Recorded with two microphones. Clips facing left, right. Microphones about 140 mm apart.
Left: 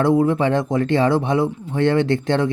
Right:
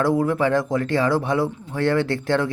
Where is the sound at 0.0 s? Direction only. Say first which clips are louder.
Left 3 dB; 20° left (ahead or behind).